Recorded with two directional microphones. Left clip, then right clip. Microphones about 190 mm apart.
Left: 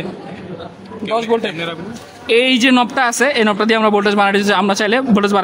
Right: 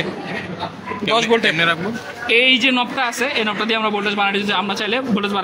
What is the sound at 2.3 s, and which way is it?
Speech, 55° left (ahead or behind).